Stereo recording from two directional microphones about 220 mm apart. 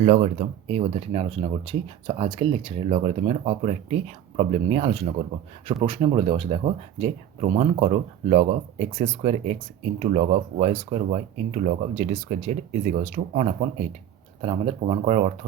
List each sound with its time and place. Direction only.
0.0 s speech: 30° right (ahead or behind)